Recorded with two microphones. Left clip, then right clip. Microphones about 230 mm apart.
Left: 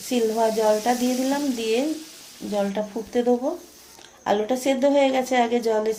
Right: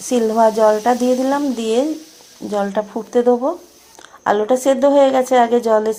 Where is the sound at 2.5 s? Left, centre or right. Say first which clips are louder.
Right 6 dB; right.